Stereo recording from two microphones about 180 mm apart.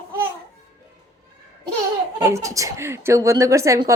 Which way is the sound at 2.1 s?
15° right (ahead or behind).